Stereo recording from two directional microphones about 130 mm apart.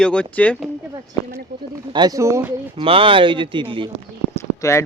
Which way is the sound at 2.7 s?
45° right (ahead or behind).